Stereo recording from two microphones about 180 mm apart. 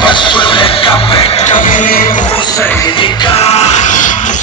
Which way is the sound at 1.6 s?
50° left (ahead or behind).